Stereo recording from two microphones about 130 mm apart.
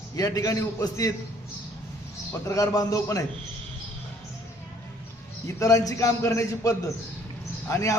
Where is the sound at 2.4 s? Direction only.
25° left (ahead or behind).